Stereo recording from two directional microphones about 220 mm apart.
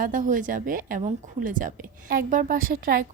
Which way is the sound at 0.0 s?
35° right (ahead or behind).